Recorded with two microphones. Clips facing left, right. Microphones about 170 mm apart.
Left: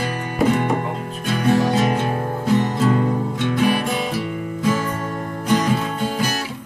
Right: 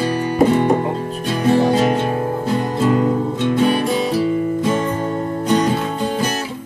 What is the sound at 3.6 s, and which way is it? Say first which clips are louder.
Music: right 3 dB; 30° right (ahead or behind).